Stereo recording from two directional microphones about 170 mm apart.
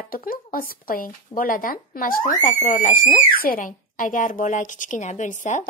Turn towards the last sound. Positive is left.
turn(degrees=45)  # may be behind; listen again after turning